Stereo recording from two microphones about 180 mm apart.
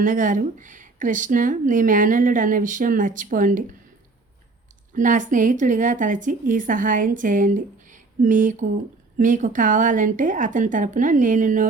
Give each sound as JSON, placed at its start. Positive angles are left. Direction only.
{"t": 0.0, "sound": "speech", "side_deg": -45}
{"t": 4.9, "sound": "speech", "side_deg": -45}